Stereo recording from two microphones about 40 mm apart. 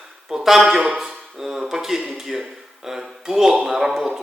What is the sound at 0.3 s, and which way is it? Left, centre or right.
Speech, centre.